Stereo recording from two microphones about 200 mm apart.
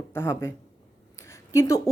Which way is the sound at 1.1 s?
15° left (ahead or behind).